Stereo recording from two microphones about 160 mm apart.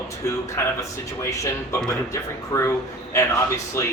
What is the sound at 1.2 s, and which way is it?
Speech, 20° left (ahead or behind).